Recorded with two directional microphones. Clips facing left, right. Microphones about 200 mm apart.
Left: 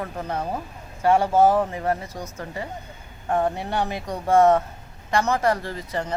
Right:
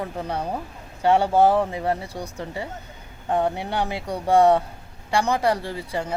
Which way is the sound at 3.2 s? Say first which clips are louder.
Even; 15° right (ahead or behind).